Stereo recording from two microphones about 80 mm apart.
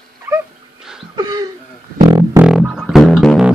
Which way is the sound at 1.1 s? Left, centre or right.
Right.